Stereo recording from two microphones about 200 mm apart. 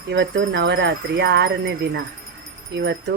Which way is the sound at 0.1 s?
65° right (ahead or behind).